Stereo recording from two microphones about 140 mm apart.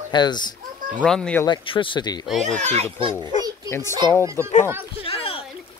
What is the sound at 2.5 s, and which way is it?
Speech, 55° right (ahead or behind).